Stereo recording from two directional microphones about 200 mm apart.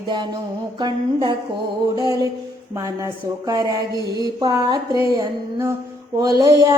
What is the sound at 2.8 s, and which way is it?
Speech, 15° right (ahead or behind).